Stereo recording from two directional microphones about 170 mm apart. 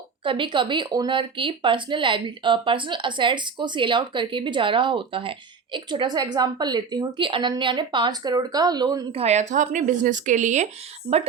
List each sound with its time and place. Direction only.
0.3 s speech: 30° right (ahead or behind)
9.1 s speech: 40° right (ahead or behind)